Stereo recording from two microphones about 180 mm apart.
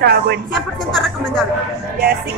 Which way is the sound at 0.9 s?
Centre (ahead or behind).